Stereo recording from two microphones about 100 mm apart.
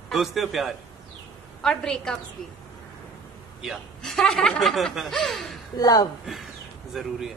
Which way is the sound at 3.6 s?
Centre (ahead or behind).